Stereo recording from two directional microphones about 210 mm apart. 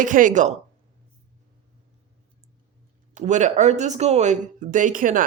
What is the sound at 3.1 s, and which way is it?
A woman's voice, 35° right (ahead or behind).